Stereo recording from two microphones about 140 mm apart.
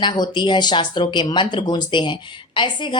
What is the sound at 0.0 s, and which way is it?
A woman's voice, 30° left (ahead or behind).